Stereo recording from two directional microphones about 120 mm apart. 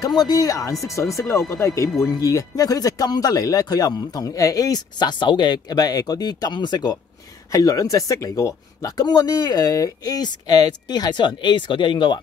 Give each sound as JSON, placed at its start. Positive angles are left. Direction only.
{"t": 0.0, "sound": "speech", "side_deg": 35}